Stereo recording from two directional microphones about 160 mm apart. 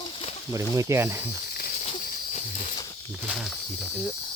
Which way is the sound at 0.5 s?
20° right (ahead or behind).